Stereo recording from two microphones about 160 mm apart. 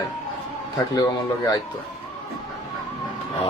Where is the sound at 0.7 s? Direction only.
25° left (ahead or behind).